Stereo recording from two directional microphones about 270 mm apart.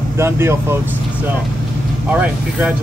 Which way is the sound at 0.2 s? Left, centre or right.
Centre.